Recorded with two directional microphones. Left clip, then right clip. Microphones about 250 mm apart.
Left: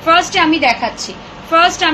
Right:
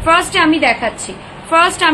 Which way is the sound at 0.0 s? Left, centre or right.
Centre.